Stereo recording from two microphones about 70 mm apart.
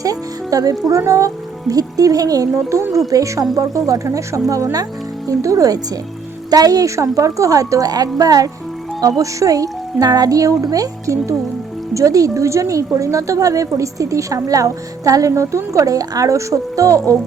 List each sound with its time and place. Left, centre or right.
0.0 s music: right
0.9 s speech: right